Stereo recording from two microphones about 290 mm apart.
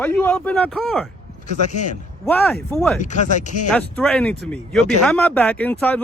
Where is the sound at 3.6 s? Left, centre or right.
Centre.